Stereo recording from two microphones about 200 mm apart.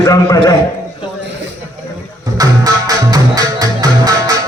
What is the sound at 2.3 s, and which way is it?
Music, 20° right (ahead or behind).